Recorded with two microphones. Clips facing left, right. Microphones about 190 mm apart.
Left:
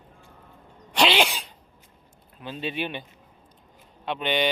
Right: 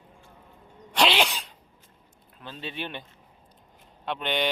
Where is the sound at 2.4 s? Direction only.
15° left (ahead or behind).